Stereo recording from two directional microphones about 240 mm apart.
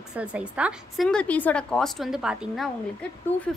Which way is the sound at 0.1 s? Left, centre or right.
Centre.